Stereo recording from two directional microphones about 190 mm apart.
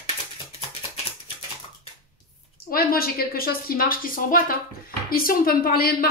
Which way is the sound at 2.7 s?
50° left (ahead or behind).